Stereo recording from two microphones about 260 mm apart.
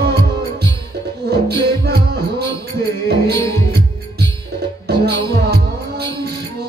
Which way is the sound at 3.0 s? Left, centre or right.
Right.